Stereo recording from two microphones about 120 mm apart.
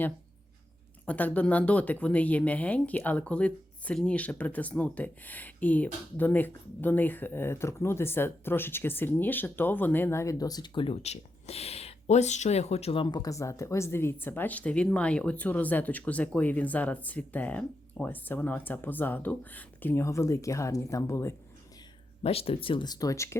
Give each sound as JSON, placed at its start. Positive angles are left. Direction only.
{"t": 1.0, "sound": "speech", "side_deg": 15}
{"t": 11.0, "sound": "speech", "side_deg": 65}
{"t": 22.2, "sound": "speech", "side_deg": 55}